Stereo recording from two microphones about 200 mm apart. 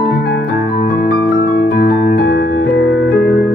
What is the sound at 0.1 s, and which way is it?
Music, 55° left (ahead or behind).